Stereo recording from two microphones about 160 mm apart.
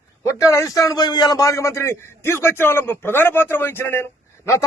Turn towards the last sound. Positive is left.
turn(degrees=15)  # may be behind; listen again after turning